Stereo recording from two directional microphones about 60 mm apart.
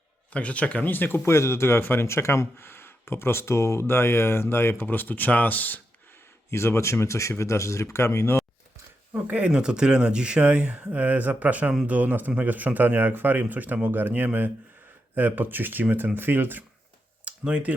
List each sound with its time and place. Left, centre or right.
0.3 s speech: left
1.2 s speech: left
4.8 s speech: left
6.5 s speech: left
9.1 s speech: right
17.2 s a sound: right